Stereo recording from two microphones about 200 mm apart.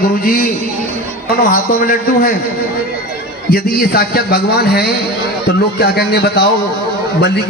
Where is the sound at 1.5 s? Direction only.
45° left (ahead or behind).